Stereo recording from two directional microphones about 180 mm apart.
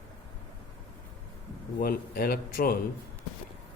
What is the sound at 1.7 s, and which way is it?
A man's voice, 55° left (ahead or behind).